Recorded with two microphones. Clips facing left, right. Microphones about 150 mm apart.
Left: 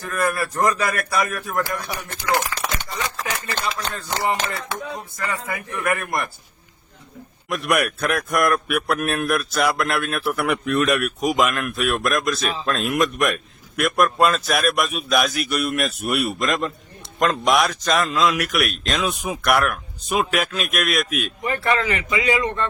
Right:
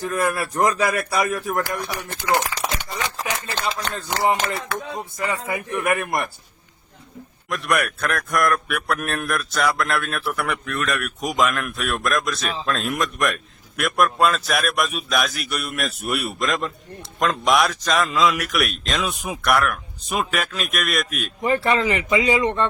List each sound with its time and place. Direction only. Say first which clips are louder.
0.0 s speech: right 1 dB; 20° right (ahead or behind)
3.7 s speech: right 2 dB; 25° right (ahead or behind)
7.5 s a man's voice: left 1 dB; 5° left (ahead or behind)
10.4 s speech: left 5 dB; 20° left (ahead or behind)
11.0 s a man's voice: left 2 dB; 5° left (ahead or behind)
21.4 s speech: right 3 dB; 25° right (ahead or behind)